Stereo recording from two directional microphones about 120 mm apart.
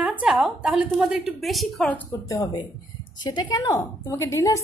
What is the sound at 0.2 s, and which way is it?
A woman's voice, 5° right (ahead or behind).